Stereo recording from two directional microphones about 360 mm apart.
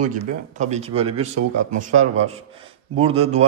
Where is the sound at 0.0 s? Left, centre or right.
Right.